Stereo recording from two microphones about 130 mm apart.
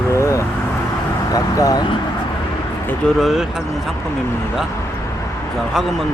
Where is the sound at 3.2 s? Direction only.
Centre (ahead or behind).